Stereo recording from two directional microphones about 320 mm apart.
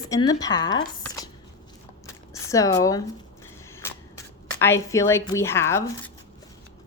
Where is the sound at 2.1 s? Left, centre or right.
Centre.